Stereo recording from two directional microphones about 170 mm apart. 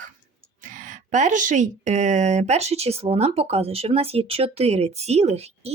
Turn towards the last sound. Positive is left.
turn(degrees=-40)  # may be behind; listen again after turning